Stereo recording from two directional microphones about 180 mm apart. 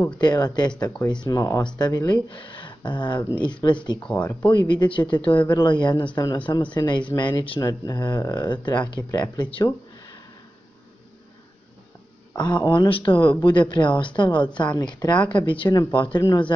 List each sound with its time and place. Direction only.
0.2 s speech: 25° left (ahead or behind)
4.0 s speech: 10° left (ahead or behind)
4.7 s speech: 30° left (ahead or behind)
12.4 s speech: 25° left (ahead or behind)